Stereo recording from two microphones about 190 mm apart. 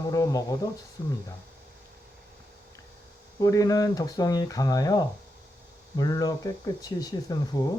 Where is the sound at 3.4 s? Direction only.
20° left (ahead or behind).